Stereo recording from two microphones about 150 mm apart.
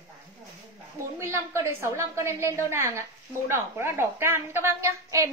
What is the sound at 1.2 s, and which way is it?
A woman's voice, 20° right (ahead or behind).